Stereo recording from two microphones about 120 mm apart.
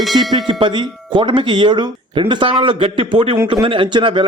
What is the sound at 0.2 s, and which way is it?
A man's voice, 35° right (ahead or behind).